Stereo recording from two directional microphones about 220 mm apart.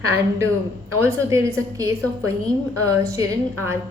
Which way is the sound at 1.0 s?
15° right (ahead or behind).